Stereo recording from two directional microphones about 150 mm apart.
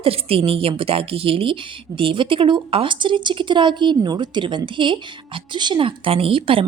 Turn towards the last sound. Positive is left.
turn(degrees=-35)  # may be behind; listen again after turning